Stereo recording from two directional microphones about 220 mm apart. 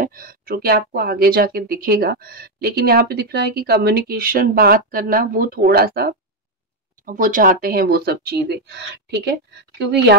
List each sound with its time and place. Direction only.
0.0 s speech: 40° right (ahead or behind)